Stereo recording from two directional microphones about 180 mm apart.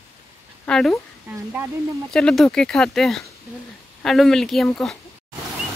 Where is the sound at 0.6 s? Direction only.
5° left (ahead or behind).